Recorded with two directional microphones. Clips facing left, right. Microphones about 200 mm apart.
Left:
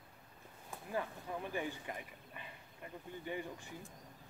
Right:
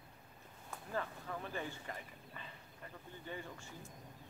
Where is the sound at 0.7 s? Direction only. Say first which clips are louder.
Left 2 dB; 15° left (ahead or behind).